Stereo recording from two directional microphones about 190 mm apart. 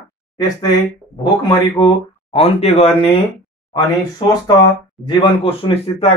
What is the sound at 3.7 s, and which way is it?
Speech, 20° left (ahead or behind).